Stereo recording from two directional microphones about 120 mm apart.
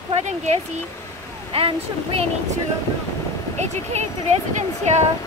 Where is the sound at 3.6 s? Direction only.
70° right (ahead or behind).